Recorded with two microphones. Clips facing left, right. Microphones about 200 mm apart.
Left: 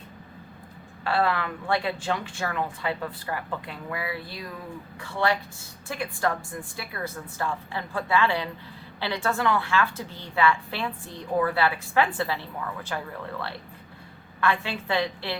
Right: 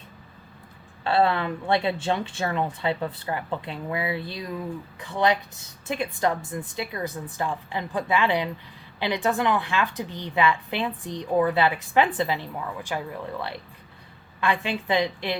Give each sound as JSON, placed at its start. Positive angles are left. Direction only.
{"t": 1.0, "sound": "a woman's voice", "side_deg": -25}
{"t": 14.4, "sound": "a woman's voice", "side_deg": -15}